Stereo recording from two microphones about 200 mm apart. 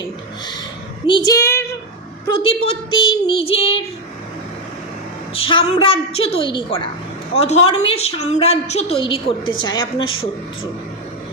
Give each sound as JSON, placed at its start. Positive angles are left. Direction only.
{"t": 1.0, "sound": "a woman's voice", "side_deg": 20}
{"t": 2.2, "sound": "a woman's voice", "side_deg": 25}
{"t": 5.3, "sound": "a woman's voice", "side_deg": 25}